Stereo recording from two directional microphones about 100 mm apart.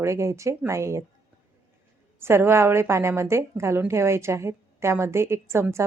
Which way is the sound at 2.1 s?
25° right (ahead or behind).